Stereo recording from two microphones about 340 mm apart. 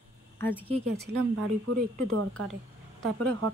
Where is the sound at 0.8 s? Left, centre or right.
Right.